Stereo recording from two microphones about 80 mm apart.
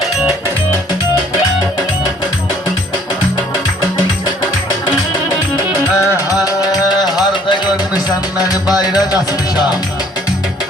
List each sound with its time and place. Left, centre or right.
6.4 s music: left
8.4 s music: left